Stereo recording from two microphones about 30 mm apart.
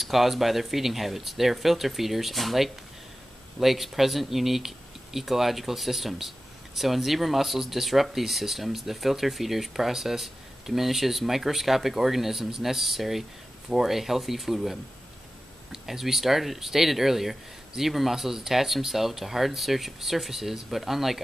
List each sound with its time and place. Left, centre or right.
0.0 s speech: centre